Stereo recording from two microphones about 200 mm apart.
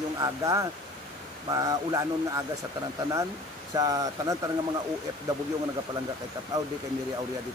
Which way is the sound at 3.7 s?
20° right (ahead or behind).